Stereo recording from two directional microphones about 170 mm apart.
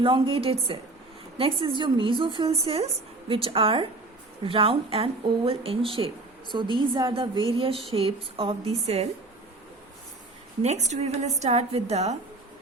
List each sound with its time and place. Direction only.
0.0 s a woman's voice: 30° right (ahead or behind)
10.6 s a woman's voice: 40° right (ahead or behind)